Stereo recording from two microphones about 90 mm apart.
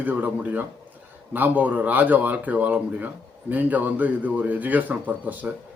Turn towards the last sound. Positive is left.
turn(degrees=-20)  # may be behind; listen again after turning